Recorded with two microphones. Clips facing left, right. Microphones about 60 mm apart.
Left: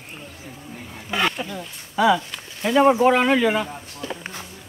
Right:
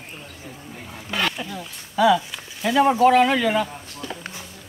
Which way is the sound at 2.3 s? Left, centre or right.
Centre.